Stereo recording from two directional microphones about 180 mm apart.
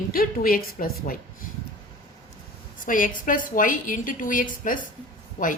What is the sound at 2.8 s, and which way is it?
A woman's voice, 50° left (ahead or behind).